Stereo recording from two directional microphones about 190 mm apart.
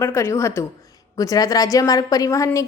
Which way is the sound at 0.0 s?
15° left (ahead or behind).